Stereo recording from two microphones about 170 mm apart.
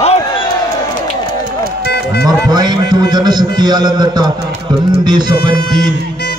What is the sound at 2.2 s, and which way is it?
A man's voice, 25° right (ahead or behind).